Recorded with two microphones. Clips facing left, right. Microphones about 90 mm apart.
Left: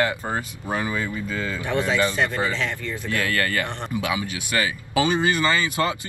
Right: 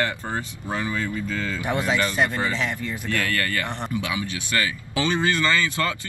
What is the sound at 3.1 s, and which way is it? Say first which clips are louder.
Speech: left 2 dB; 25° left (ahead or behind).